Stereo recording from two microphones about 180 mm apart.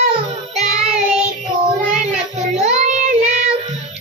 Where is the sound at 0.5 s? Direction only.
40° right (ahead or behind).